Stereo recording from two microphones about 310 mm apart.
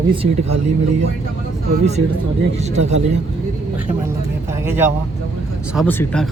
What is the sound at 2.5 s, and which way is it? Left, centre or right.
Speech, right.